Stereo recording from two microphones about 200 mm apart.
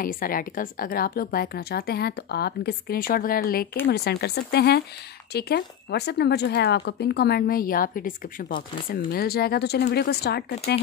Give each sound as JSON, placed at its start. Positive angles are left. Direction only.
{"t": 0.0, "sound": "speech", "side_deg": 45}